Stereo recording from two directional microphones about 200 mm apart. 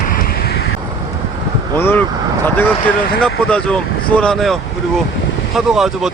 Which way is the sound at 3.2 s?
5° left (ahead or behind).